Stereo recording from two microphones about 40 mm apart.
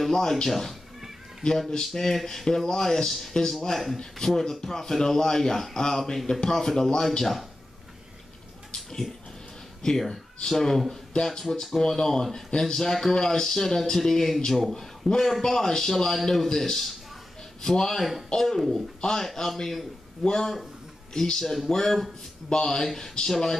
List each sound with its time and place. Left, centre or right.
0.2 s speech: centre
0.5 s speech: centre
1.9 s speech: centre
8.7 s a sound: centre
9.8 s speech: centre